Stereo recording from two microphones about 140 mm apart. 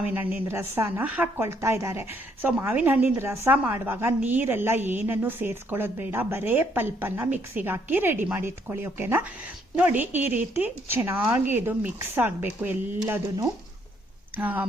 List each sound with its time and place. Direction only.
0.0 s a woman's voice: 10° right (ahead or behind)
14.3 s a woman's voice: 10° right (ahead or behind)